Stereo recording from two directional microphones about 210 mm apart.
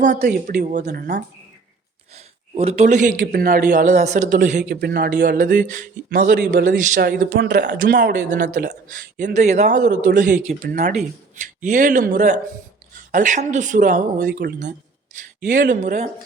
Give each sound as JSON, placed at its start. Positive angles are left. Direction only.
{"t": 0.3, "sound": "speech", "side_deg": -40}
{"t": 0.9, "sound": "a man's voice", "side_deg": -50}
{"t": 2.1, "sound": "speech", "side_deg": -30}
{"t": 4.7, "sound": "a man's voice", "side_deg": -50}